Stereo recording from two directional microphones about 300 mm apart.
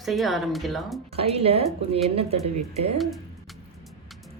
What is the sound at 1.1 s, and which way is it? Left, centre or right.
Speech, centre.